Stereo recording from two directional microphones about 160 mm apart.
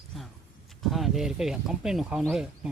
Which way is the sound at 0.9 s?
Centre (ahead or behind).